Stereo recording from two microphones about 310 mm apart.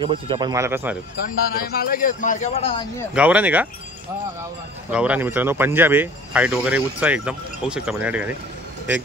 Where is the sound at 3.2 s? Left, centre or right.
Centre.